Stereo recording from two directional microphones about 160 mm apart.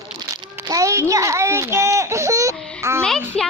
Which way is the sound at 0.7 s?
20° right (ahead or behind).